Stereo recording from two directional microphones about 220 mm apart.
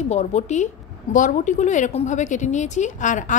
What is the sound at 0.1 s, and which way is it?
A woman's voice, 30° left (ahead or behind).